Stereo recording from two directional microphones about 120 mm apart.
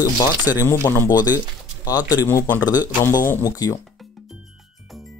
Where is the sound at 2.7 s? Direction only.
15° right (ahead or behind).